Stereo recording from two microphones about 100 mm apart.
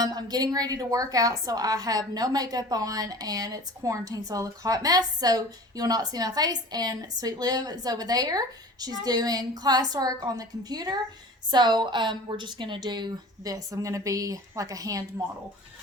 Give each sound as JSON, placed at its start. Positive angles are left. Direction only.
{"t": 0.0, "sound": "a woman's voice", "side_deg": -40}